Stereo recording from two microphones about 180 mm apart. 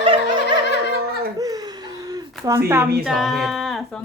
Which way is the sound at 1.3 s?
20° right (ahead or behind).